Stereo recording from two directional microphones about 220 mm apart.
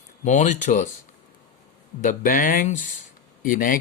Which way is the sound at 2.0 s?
35° left (ahead or behind).